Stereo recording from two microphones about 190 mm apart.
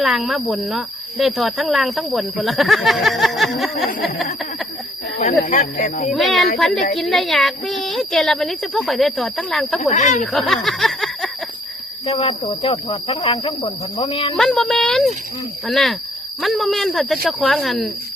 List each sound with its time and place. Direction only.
0.0 s speech: centre (ahead or behind)
5.2 s speech: 40° left (ahead or behind)
6.1 s speech: centre (ahead or behind)
9.9 s speech: 40° left (ahead or behind)
10.3 s snicker: centre (ahead or behind)
12.0 s speech: 30° left (ahead or behind)
14.3 s speech: centre (ahead or behind)